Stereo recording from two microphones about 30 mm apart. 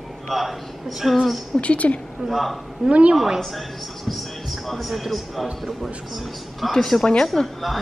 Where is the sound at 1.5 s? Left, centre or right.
Left.